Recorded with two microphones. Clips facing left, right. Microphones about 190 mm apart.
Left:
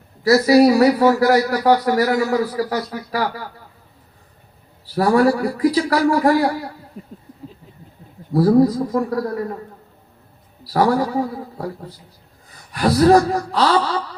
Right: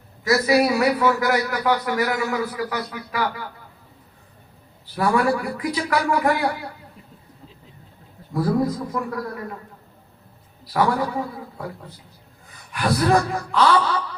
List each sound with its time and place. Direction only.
0.3 s speech: 35° left (ahead or behind)
4.9 s speech: 35° left (ahead or behind)
7.0 s a sound: 40° left (ahead or behind)
8.3 s speech: 35° left (ahead or behind)
10.6 s speech: 35° left (ahead or behind)
12.7 s speech: 35° left (ahead or behind)